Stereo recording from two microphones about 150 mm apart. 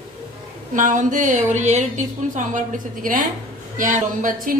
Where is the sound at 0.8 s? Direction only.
60° right (ahead or behind).